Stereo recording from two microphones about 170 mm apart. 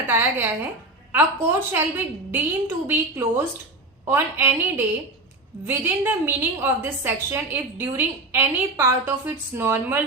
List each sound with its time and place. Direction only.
0.1 s a woman's voice: 10° right (ahead or behind)